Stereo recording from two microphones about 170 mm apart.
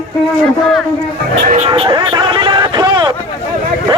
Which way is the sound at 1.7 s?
30° right (ahead or behind).